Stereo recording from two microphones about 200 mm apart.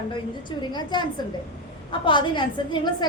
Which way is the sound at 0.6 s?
20° left (ahead or behind).